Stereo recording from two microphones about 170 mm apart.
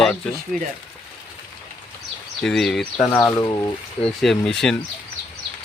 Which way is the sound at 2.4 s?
Centre (ahead or behind).